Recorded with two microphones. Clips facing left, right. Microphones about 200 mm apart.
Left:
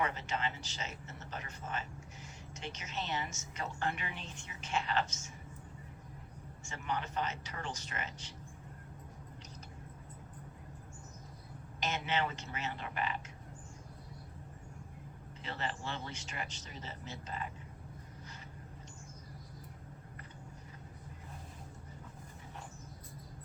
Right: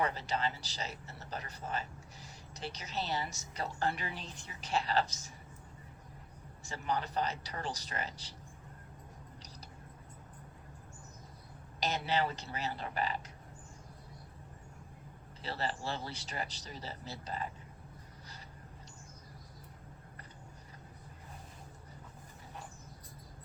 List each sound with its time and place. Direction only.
0.0 s speech: 35° right (ahead or behind)
6.7 s speech: 35° right (ahead or behind)
11.8 s speech: 35° right (ahead or behind)
15.4 s speech: 35° right (ahead or behind)